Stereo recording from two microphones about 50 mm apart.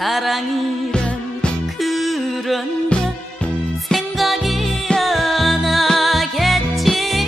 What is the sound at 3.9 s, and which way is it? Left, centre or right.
Music, centre.